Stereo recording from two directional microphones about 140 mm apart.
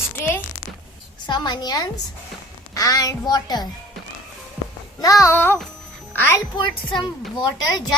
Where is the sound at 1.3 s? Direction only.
30° left (ahead or behind).